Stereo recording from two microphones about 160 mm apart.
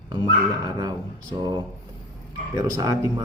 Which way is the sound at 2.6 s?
20° right (ahead or behind).